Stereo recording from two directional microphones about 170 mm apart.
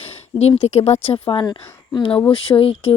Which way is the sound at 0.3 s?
35° left (ahead or behind).